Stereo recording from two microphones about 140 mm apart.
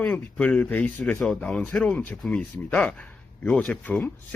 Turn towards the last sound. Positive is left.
turn(degrees=10)  # may be behind; listen again after turning